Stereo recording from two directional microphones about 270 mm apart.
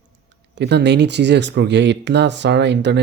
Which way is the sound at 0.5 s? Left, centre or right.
Right.